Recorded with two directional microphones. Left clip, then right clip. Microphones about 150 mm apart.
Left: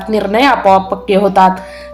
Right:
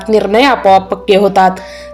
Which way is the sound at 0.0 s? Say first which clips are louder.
Right 2 dB; 35° right (ahead or behind).